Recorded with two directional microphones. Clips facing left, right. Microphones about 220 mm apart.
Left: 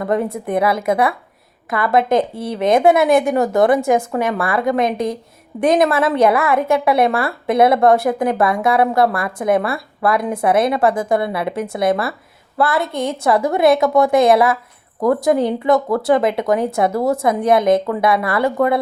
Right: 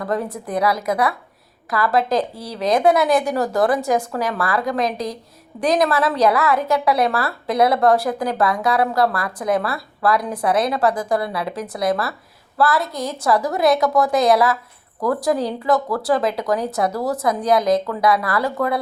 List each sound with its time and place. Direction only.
0.0 s a woman's voice: 25° left (ahead or behind)